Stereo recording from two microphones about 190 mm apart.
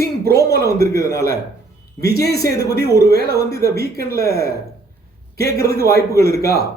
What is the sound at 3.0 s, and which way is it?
Speech, 60° left (ahead or behind).